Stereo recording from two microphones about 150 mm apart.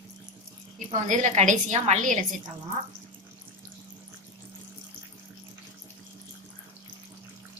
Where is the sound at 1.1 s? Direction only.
55° right (ahead or behind).